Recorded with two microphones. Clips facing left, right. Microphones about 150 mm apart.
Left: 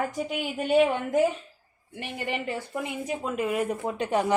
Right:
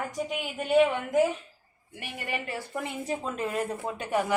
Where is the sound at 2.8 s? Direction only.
10° left (ahead or behind).